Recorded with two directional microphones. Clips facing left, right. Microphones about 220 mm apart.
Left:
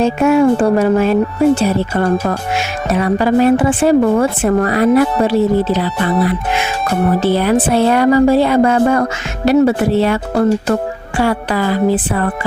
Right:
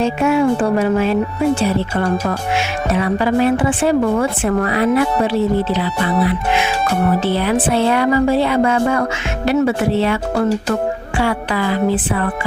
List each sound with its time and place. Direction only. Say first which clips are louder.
0.0 s a woman's voice: left 4 dB; 45° left (ahead or behind)
7.2 s a woman's voice: left 4 dB; 45° left (ahead or behind)
11.2 s a woman's voice: left 4 dB; 40° left (ahead or behind)